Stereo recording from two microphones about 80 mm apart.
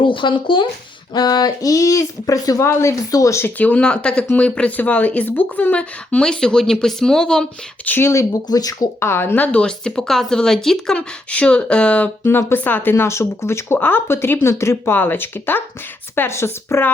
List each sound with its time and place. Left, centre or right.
0.0 s speech: left
1.1 s speech: left
3.6 s speech: centre
7.9 s speech: left
8.4 s speech: left
9.0 s speech: left; by 10.9 s centre
10.9 s speech: centre
12.2 s speech: left